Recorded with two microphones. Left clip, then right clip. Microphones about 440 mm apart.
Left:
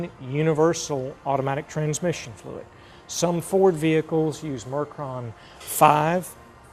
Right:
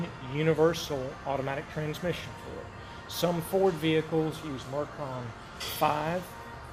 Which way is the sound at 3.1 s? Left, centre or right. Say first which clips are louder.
Left 5 dB; left.